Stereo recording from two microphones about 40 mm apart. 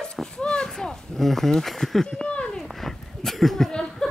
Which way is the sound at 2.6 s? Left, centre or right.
Centre.